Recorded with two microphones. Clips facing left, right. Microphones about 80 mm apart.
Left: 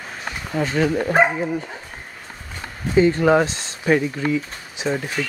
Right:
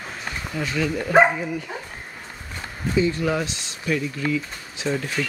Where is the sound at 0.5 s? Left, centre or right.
Left.